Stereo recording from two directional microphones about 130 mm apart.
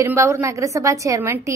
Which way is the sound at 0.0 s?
20° right (ahead or behind).